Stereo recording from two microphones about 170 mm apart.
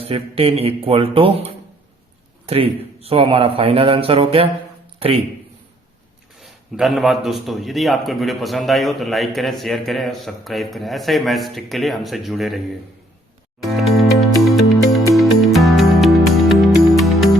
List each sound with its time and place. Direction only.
0.0 s a man's voice: 35° right (ahead or behind)
6.4 s a man's voice: centre (ahead or behind)
13.6 s music: centre (ahead or behind)